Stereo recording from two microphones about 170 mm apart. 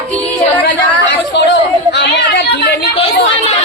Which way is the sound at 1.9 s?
85° left.